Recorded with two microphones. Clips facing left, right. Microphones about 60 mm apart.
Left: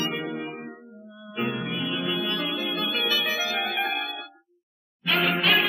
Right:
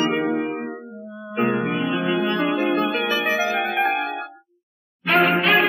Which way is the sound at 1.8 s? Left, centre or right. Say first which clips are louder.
Right 7 dB; right.